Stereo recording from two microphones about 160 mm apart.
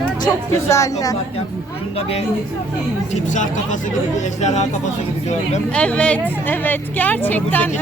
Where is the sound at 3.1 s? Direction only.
50° left (ahead or behind).